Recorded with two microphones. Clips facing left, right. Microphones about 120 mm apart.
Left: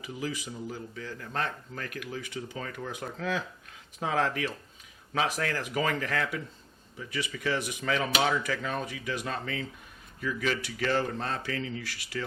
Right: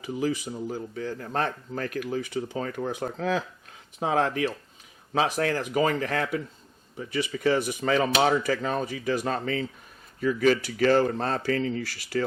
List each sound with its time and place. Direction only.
0.0 s speech: 35° right (ahead or behind)